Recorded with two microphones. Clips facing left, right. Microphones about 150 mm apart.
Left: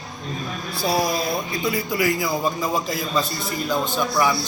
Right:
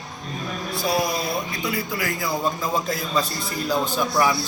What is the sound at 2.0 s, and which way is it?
A man's voice, 15° left (ahead or behind).